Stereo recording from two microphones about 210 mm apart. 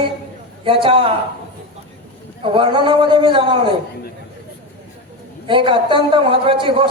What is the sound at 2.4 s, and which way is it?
A man's voice, 25° right (ahead or behind).